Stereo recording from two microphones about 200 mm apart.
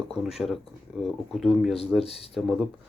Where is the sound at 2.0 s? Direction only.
30° left (ahead or behind).